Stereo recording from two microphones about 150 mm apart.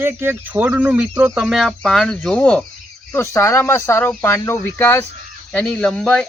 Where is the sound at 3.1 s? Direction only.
20° left (ahead or behind).